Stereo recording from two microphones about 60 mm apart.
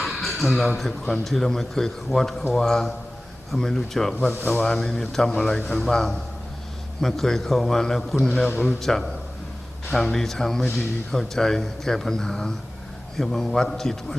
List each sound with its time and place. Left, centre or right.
0.2 s a sound: centre
0.8 s a man's voice: centre
4.3 s speech: left
4.6 s a man's voice: centre